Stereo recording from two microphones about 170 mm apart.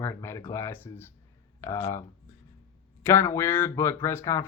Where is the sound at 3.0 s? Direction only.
15° left (ahead or behind).